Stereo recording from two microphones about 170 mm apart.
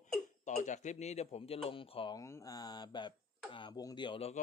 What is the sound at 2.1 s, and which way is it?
Speech, 20° left (ahead or behind).